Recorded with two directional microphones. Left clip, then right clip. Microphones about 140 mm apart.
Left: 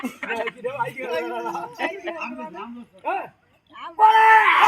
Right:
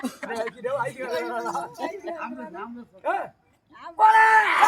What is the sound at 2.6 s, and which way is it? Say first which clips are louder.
Speech: even; centre (ahead or behind).